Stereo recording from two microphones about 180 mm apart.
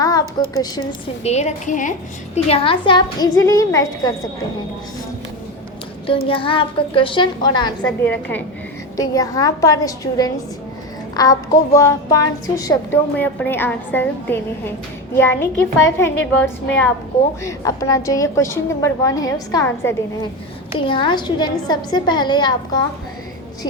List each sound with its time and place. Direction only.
0.0 s a sound: 20° left (ahead or behind)
1.2 s a woman's voice: 40° left (ahead or behind); by 4.1 s 20° left (ahead or behind)
6.2 s a woman's voice: 30° left (ahead or behind)
8.0 s a woman's voice: 10° left (ahead or behind)
17.4 s a woman's voice: 20° left (ahead or behind)
20.7 s a woman's voice: 25° left (ahead or behind)